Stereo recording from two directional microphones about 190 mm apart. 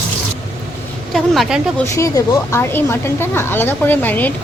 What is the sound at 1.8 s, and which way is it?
A woman's voice, 15° left (ahead or behind).